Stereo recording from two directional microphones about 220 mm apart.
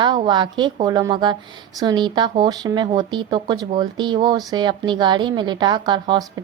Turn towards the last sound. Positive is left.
turn(degrees=-20)  # may be behind; listen again after turning